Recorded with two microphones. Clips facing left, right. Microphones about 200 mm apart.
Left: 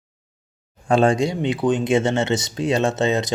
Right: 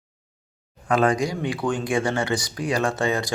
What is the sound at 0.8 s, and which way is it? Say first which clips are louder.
Speech: left 4 dB; 30° left (ahead or behind).